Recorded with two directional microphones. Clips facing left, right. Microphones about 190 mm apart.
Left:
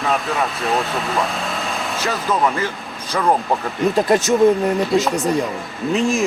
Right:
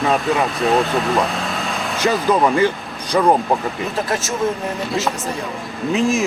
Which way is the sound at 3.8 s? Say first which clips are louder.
Left 6 dB; centre (ahead or behind).